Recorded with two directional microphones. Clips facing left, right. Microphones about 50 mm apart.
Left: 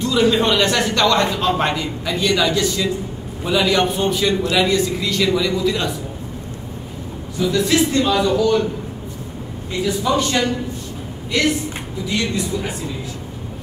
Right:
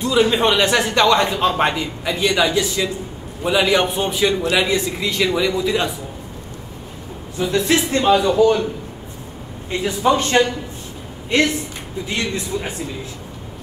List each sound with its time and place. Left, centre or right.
0.0 s a man's voice: centre
7.3 s a man's voice: right
9.7 s a man's voice: right